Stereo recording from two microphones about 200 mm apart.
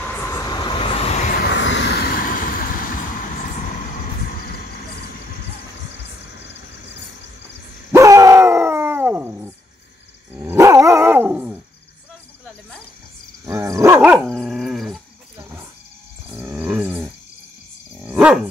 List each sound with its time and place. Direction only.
0.0 s vehicle: 10° left (ahead or behind); by 0.9 s 25° left (ahead or behind)
1.5 s vehicle: 65° left (ahead or behind); by 3.6 s 40° left (ahead or behind)
4.3 s a sound: 45° left (ahead or behind)
6.0 s vehicle: 60° left (ahead or behind)
7.9 s dog: 15° right (ahead or behind)
13.5 s dog: 15° right (ahead or behind)
14.3 s roaring cats: centre (ahead or behind)
18.0 s dog: 5° right (ahead or behind)